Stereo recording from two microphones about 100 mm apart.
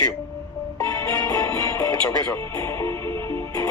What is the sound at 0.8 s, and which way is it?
Music, 30° left (ahead or behind).